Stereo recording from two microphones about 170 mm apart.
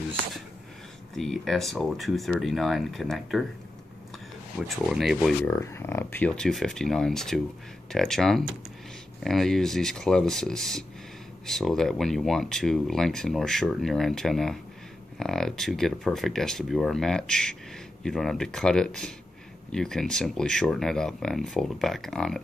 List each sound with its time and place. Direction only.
1.1 s speech: centre (ahead or behind)
4.6 s speech: centre (ahead or behind)
5.5 s speech: 15° left (ahead or behind)